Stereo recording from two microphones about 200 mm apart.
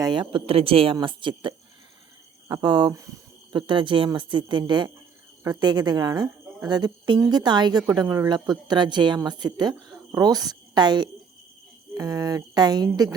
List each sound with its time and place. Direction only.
0.0 s a woman's voice: 25° right (ahead or behind)